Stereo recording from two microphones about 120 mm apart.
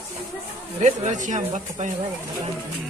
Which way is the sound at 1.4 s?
65° right (ahead or behind).